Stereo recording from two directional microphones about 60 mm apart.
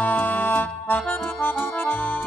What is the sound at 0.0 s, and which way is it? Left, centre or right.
Music, left.